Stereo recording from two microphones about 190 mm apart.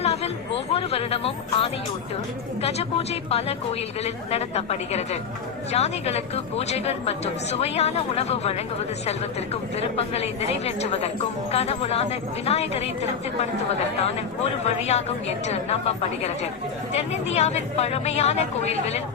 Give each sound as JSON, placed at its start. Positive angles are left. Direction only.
{"t": 0.0, "sound": "speech", "side_deg": 35}
{"t": 9.7, "sound": "speech", "side_deg": 30}